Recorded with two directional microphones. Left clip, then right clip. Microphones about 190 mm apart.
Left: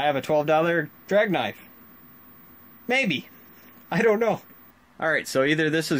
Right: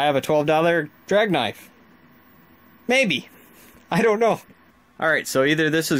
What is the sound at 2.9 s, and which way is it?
Speech, 40° right (ahead or behind).